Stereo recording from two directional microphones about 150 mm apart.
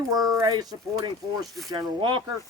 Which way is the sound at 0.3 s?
25° right (ahead or behind).